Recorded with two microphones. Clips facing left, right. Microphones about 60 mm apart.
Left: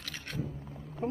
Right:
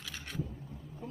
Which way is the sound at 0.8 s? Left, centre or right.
Left.